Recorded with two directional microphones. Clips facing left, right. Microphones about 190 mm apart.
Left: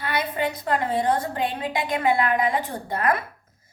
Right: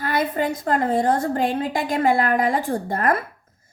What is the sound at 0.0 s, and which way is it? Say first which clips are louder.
A woman's voice: right 3 dB; 45° right (ahead or behind).